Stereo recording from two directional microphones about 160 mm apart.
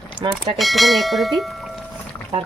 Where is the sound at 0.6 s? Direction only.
Centre (ahead or behind).